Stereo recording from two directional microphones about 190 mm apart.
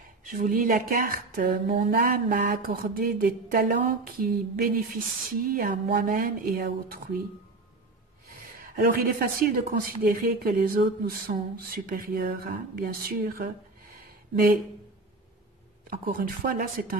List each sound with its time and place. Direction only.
0.2 s speech: 45° right (ahead or behind)
8.3 s speech: 50° right (ahead or behind)
15.9 s speech: 50° right (ahead or behind)